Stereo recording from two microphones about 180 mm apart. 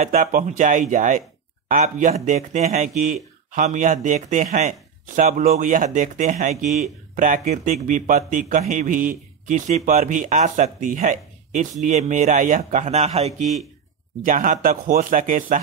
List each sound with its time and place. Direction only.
0.0 s speech: 45° right (ahead or behind)
14.2 s speech: 45° right (ahead or behind)